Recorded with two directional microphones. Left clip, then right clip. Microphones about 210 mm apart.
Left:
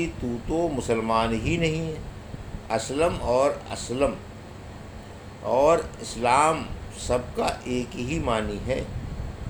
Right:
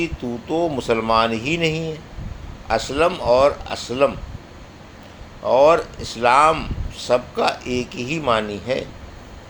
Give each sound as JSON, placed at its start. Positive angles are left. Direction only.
{"t": 0.0, "sound": "a man's voice", "side_deg": -20}
{"t": 5.5, "sound": "a man's voice", "side_deg": -20}